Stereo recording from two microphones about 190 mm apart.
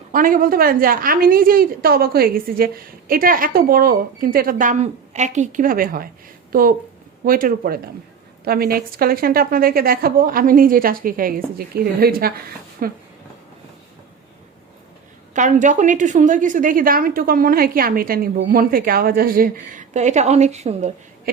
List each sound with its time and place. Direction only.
0.1 s a woman's voice: 45° right (ahead or behind)
15.3 s a woman's voice: 40° right (ahead or behind)